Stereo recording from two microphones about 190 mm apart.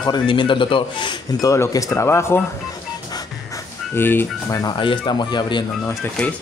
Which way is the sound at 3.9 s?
10° left (ahead or behind).